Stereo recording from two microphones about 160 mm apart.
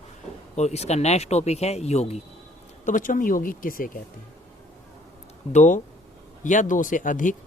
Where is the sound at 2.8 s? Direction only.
55° left (ahead or behind).